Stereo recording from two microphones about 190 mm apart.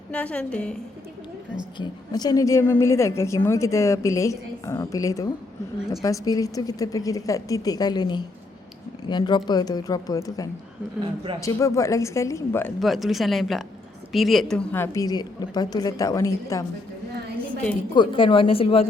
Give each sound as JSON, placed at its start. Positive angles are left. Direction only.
{"t": 0.1, "sound": "speech", "side_deg": 5}
{"t": 1.8, "sound": "a woman's voice", "side_deg": 20}
{"t": 11.0, "sound": "a man's voice", "side_deg": -25}
{"t": 11.3, "sound": "a woman's voice", "side_deg": 15}
{"t": 12.8, "sound": "a woman's voice", "side_deg": 0}
{"t": 17.9, "sound": "a woman's voice", "side_deg": 25}